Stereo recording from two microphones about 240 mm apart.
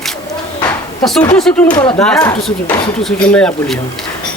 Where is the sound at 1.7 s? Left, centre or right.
Centre.